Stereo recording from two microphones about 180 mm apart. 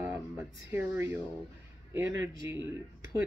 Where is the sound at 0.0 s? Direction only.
10° right (ahead or behind).